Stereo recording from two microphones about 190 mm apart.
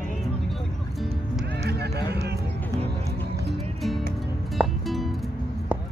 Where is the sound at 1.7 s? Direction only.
60° right (ahead or behind).